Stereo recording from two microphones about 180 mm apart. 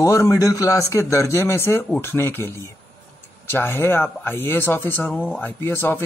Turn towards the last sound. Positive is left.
turn(degrees=10)  # may be behind; listen again after turning